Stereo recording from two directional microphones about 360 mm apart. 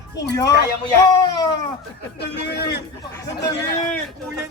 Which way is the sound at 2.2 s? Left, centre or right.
Left.